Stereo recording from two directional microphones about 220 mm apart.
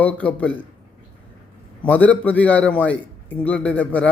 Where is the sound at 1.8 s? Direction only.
5° left (ahead or behind).